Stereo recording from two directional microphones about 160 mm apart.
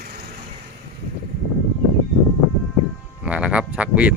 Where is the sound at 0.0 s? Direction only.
70° right (ahead or behind).